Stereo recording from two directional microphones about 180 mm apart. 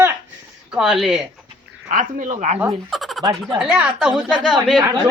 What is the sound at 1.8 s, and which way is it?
Speech, 45° right (ahead or behind).